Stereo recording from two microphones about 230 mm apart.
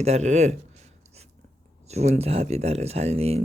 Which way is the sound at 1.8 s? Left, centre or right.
Right.